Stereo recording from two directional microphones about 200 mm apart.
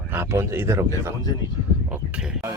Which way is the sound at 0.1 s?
10° right (ahead or behind).